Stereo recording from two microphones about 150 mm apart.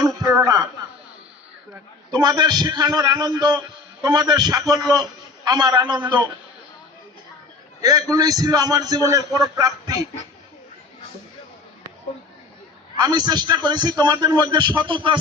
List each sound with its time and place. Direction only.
0.0 s a sound: 25° right (ahead or behind)
2.0 s a man's voice: 25° right (ahead or behind)
7.8 s a man's voice: 25° right (ahead or behind)
13.0 s a man's voice: 30° right (ahead or behind)